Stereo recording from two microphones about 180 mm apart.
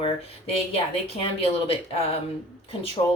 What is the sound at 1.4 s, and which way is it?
Speech, 35° left (ahead or behind).